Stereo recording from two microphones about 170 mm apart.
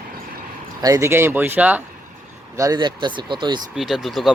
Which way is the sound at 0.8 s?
20° right (ahead or behind).